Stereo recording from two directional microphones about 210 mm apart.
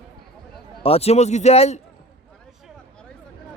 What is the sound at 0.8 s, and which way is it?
A man's voice, 30° left (ahead or behind).